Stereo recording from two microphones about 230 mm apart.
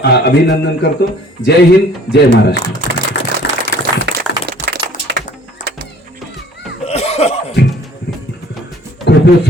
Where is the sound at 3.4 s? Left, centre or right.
Left.